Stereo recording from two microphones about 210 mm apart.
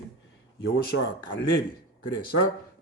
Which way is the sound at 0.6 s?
55° left (ahead or behind).